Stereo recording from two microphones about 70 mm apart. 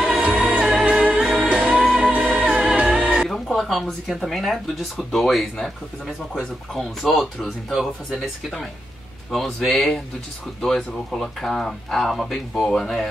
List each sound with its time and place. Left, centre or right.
0.0 s music: centre
3.3 s a sound: centre
4.3 s speech: centre